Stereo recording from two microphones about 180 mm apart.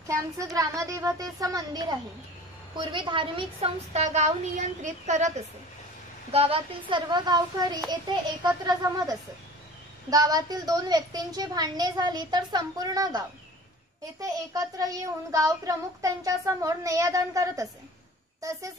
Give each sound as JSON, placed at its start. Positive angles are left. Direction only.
{"t": 0.1, "sound": "a child's voice", "side_deg": -20}
{"t": 1.4, "sound": "child singing", "side_deg": -20}
{"t": 2.8, "sound": "a woman's voice", "side_deg": -25}
{"t": 6.3, "sound": "child singing", "side_deg": -30}
{"t": 10.0, "sound": "child singing", "side_deg": -20}
{"t": 14.2, "sound": "child singing", "side_deg": -20}
{"t": 18.4, "sound": "speech", "side_deg": -15}